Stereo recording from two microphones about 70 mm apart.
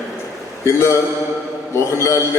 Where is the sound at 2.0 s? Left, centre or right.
Left.